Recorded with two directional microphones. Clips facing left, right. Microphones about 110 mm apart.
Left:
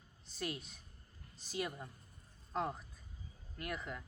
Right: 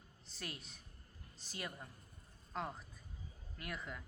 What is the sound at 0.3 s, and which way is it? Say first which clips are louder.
Speech: left 7 dB; 10° left (ahead or behind).